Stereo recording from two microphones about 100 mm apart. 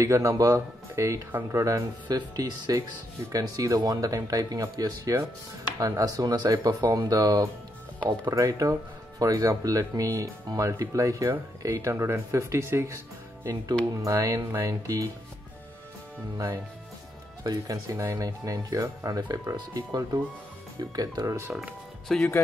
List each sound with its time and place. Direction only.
0.0 s speech: 30° right (ahead or behind)
17.4 s speech: 35° right (ahead or behind)
21.5 s speech: 5° left (ahead or behind)